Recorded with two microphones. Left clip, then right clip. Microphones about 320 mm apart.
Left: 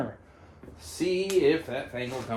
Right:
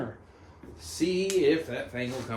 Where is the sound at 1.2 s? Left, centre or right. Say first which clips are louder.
Left 1 dB; centre.